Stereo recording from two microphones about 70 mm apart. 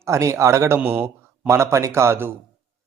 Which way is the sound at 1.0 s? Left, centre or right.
Right.